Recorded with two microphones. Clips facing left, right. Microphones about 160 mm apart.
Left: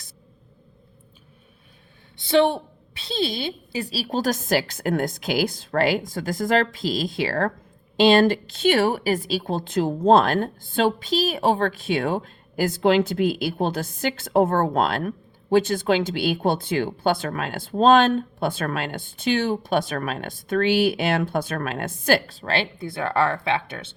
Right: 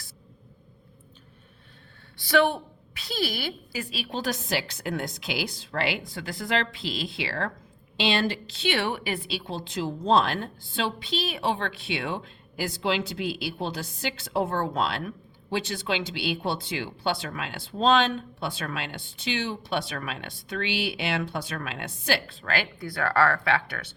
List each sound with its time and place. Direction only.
2.1 s a woman's voice: 25° left (ahead or behind)